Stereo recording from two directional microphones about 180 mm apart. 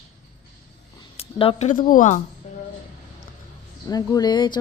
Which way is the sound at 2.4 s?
40° left (ahead or behind).